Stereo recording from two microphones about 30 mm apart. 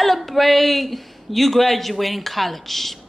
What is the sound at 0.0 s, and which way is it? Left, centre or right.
Speech, centre.